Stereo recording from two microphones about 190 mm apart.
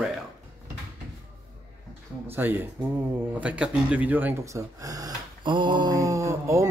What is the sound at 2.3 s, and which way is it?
Speech, 10° right (ahead or behind).